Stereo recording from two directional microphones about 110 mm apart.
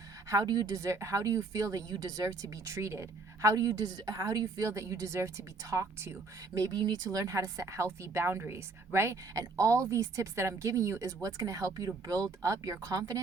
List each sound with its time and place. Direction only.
0.3 s speech: 35° right (ahead or behind)